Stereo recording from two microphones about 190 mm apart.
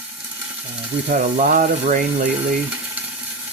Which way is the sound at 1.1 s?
40° right (ahead or behind).